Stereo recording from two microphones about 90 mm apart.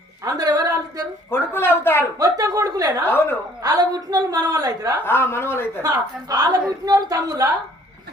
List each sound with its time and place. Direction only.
0.3 s a sound: 45° right (ahead or behind)
1.3 s speech: 25° left (ahead or behind)
2.1 s a woman's voice: 40° right (ahead or behind)
5.0 s speech: 25° left (ahead or behind)
5.8 s a woman's voice: 45° right (ahead or behind)